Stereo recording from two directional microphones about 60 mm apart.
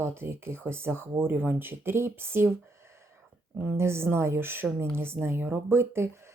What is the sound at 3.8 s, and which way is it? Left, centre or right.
A woman's voice, right.